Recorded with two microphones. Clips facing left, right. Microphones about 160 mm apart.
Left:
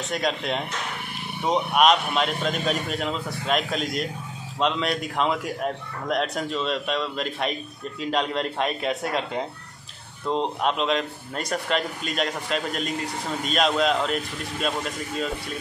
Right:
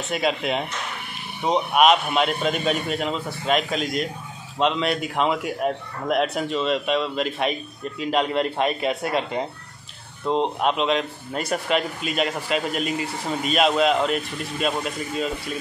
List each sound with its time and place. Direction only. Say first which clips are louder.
0.1 s speech: right 3 dB; 5° right (ahead or behind)